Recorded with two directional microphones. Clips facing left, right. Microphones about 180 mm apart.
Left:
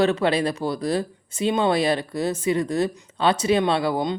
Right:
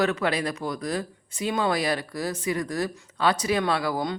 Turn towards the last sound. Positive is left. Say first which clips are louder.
# left 4 dB
turn(degrees=25)  # may be behind; listen again after turning